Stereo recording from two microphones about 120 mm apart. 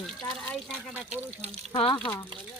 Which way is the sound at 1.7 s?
45° left (ahead or behind).